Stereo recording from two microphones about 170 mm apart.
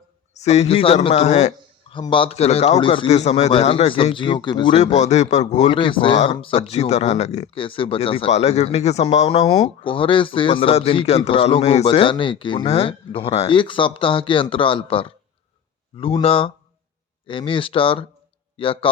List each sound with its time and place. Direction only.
0.3 s speech: 40° left (ahead or behind)
1.9 s speech: 30° left (ahead or behind)
4.8 s speech: 40° left (ahead or behind)
9.5 s speech: 25° left (ahead or behind)